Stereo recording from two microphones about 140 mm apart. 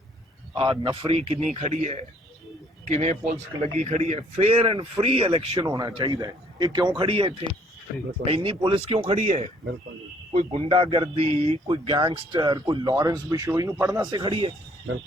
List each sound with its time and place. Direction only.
0.5 s a man's voice: 35° right (ahead or behind)
1.5 s a man's voice: 55° right (ahead or behind)
5.5 s speech: 25° right (ahead or behind)
7.1 s a man's voice: 40° right (ahead or behind)
10.3 s a man's voice: 40° right (ahead or behind)